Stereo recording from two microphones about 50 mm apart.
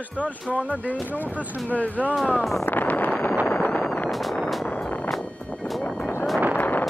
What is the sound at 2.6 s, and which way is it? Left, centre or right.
Speech, left.